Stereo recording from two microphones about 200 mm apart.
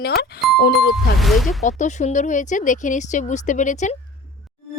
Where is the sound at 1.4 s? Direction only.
35° left (ahead or behind).